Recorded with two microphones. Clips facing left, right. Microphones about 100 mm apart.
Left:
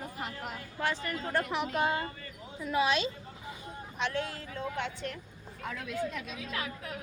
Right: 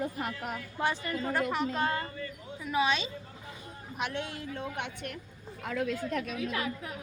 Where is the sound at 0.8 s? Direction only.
15° right (ahead or behind).